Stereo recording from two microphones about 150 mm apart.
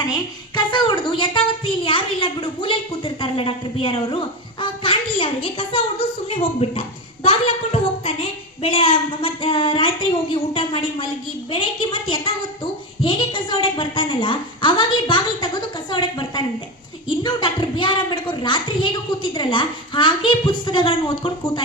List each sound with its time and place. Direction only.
0.1 s a woman's voice: 30° left (ahead or behind)